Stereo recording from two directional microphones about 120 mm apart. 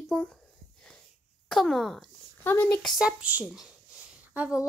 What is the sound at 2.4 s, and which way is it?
Speech, 15° left (ahead or behind).